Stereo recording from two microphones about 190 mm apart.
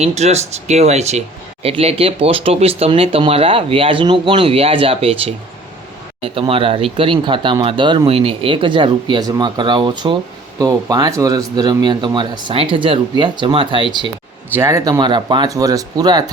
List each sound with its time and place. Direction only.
0.0 s speech: 35° right (ahead or behind)
14.5 s speech: 15° right (ahead or behind)